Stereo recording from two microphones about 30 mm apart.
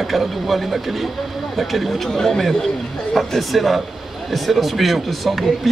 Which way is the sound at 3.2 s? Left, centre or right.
Centre.